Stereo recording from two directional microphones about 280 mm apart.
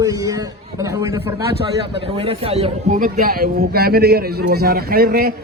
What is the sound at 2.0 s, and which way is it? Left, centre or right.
A man's voice, centre.